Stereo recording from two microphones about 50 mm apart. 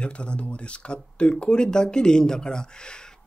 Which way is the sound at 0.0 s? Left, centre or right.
Left.